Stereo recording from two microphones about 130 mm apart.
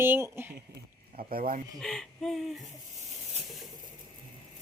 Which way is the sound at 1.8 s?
5° left (ahead or behind).